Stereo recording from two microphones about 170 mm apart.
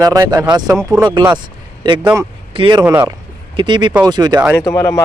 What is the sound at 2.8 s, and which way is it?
Speech, 15° right (ahead or behind).